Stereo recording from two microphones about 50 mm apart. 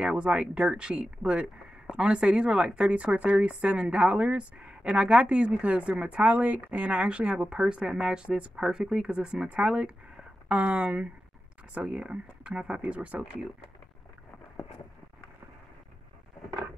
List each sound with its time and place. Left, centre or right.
0.0 s speech: centre